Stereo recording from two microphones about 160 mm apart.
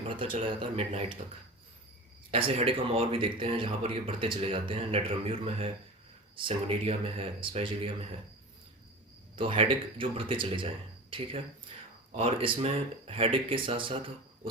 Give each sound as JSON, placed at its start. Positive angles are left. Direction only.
{"t": 0.3, "sound": "speech", "side_deg": -35}
{"t": 2.3, "sound": "speech", "side_deg": -35}
{"t": 9.3, "sound": "speech", "side_deg": -35}